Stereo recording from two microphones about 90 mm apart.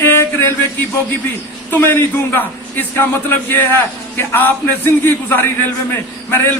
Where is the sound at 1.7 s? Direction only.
25° left (ahead or behind).